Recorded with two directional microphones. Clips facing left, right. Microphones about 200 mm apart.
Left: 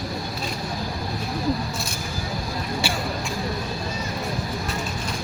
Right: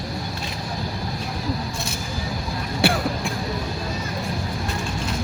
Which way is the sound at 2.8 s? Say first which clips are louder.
Right 10 dB; 60° right (ahead or behind).